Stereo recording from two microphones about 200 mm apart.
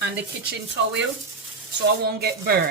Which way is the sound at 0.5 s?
65° right (ahead or behind).